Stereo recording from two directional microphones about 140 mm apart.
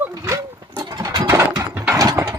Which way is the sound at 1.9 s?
25° right (ahead or behind).